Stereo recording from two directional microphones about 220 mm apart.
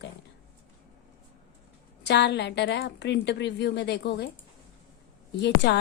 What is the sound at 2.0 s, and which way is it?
A woman's voice, 50° left (ahead or behind).